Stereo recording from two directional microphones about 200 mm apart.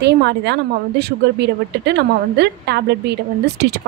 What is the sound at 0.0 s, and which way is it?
A woman's voice, 60° right (ahead or behind).